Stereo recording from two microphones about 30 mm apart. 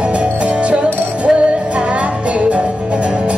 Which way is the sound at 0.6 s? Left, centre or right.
Right.